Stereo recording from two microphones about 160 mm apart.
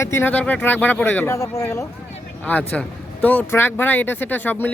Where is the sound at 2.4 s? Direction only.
10° left (ahead or behind).